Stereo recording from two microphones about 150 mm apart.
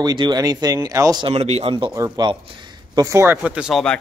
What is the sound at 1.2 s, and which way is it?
Speech, 45° right (ahead or behind).